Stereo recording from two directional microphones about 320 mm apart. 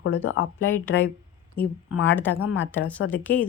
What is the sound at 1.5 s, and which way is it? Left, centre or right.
Speech, centre.